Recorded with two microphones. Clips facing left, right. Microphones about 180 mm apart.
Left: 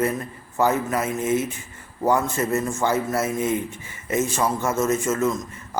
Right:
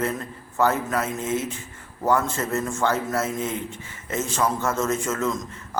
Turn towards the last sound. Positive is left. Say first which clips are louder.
# left 3 dB
turn(degrees=5)  # may be behind; listen again after turning